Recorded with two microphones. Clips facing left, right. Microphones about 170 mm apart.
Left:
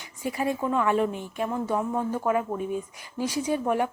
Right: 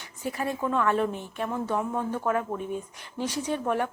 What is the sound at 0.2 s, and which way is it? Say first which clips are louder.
Speech: left 2 dB; 10° left (ahead or behind).